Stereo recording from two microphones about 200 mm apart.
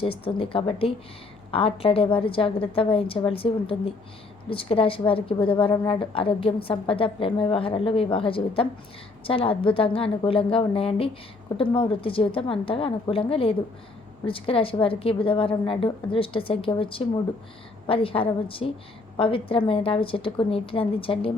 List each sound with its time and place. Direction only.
0.0 s a woman's voice: 25° left (ahead or behind)